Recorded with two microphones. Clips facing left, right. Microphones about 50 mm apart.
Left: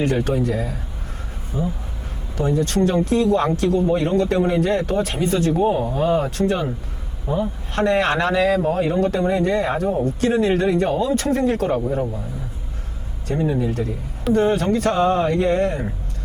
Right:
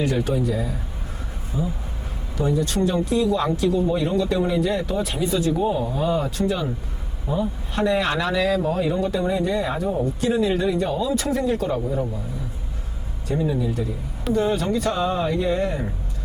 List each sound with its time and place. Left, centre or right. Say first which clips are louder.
0.0 s speech: left 2 dB; left
11.9 s speech: left 2 dB; left
13.4 s speech: left 3 dB; left